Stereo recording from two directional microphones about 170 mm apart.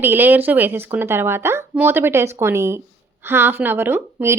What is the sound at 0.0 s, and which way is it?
Speech, 10° right (ahead or behind).